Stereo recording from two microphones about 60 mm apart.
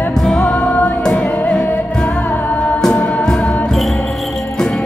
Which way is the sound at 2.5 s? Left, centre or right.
Left.